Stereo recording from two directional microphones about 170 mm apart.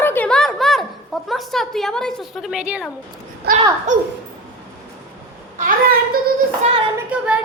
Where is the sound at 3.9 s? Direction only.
45° right (ahead or behind).